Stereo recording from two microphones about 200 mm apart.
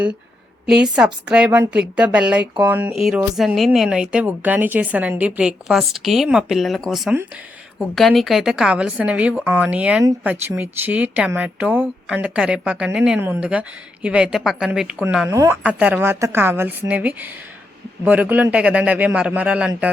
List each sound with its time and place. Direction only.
0.7 s a woman's voice: 5° right (ahead or behind)